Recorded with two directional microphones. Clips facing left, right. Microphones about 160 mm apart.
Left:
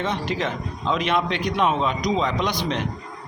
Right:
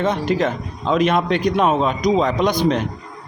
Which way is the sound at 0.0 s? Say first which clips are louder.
Right 6 dB; 45° right (ahead or behind).